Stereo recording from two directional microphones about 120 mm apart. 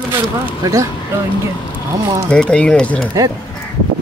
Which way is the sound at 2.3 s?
10° left (ahead or behind).